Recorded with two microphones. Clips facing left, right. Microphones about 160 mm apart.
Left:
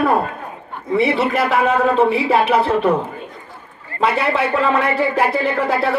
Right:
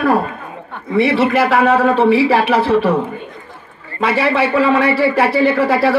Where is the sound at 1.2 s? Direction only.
90° right.